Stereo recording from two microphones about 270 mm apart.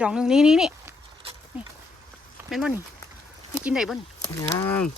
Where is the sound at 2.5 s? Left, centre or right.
Centre.